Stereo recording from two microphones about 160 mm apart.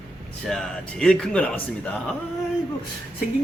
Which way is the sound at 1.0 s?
5° left (ahead or behind).